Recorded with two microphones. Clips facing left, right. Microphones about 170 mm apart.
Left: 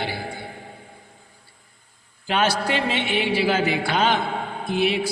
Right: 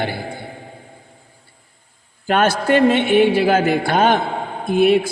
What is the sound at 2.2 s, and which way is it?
A man's voice, 50° right (ahead or behind).